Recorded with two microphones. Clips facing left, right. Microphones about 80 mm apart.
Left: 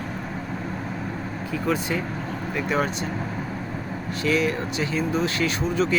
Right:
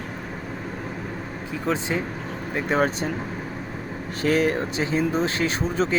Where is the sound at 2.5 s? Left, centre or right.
Right.